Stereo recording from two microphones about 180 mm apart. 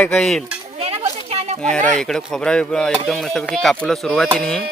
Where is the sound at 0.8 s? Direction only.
35° right (ahead or behind).